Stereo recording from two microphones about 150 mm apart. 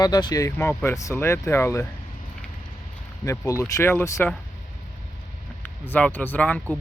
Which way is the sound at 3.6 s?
20° left (ahead or behind).